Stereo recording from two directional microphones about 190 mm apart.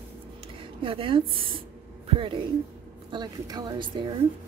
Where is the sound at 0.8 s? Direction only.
30° right (ahead or behind).